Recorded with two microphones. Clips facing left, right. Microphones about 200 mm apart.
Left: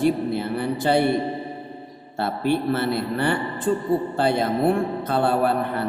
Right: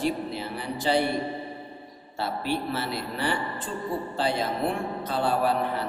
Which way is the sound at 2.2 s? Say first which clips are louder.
Left 6 dB; 55° left (ahead or behind).